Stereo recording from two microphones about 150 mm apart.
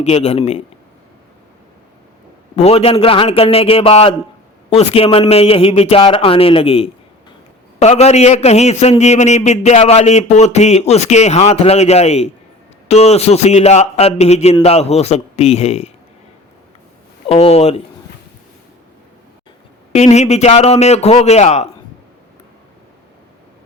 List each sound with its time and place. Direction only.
0.0 s a man's voice: 45° left (ahead or behind)
2.6 s a man's voice: 45° left (ahead or behind)
17.2 s a man's voice: 40° left (ahead or behind)
19.9 s a man's voice: 45° left (ahead or behind)